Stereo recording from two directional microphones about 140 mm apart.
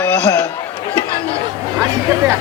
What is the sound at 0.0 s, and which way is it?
Chatter, 15° left (ahead or behind).